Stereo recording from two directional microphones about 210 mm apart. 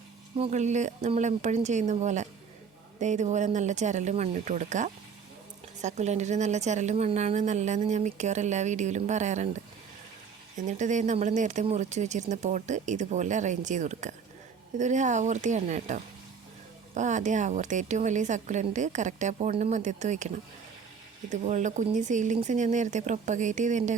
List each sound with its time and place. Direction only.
0.3 s a woman's voice: 30° right (ahead or behind)
10.7 s a woman's voice: 35° right (ahead or behind)